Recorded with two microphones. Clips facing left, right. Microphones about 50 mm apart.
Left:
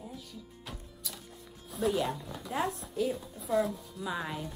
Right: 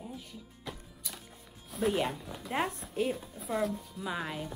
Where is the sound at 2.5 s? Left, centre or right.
Right.